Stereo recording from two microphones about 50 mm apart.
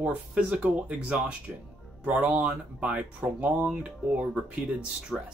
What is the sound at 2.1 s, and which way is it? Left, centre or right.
Speech, right.